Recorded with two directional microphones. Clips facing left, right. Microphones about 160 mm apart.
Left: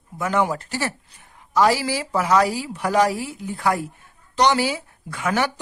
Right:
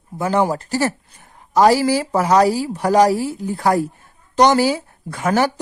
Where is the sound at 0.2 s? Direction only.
35° right (ahead or behind).